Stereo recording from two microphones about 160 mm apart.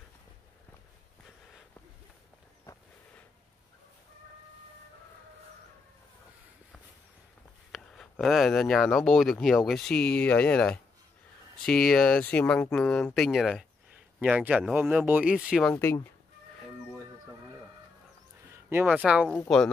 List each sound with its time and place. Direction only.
7.7 s speech: centre (ahead or behind)
15.7 s speech: 15° left (ahead or behind)
18.7 s speech: 15° right (ahead or behind)
19.5 s speech: centre (ahead or behind)